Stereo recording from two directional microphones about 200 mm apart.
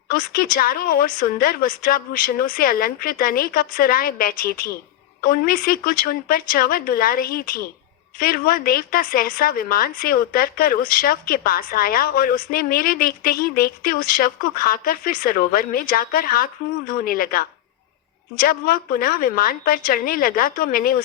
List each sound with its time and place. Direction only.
0.1 s a woman's voice: 45° left (ahead or behind)